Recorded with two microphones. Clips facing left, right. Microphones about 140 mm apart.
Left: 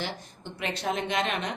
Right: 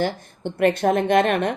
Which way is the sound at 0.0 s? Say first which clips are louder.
Right 11 dB; 55° right (ahead or behind).